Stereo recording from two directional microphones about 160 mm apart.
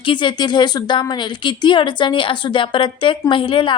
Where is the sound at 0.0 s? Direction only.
30° left (ahead or behind).